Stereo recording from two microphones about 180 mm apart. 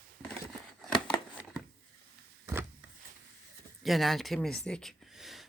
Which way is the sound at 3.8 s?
Centre (ahead or behind).